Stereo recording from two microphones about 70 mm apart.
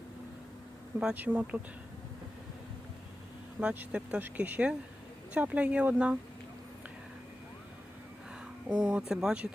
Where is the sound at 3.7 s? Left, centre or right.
Centre.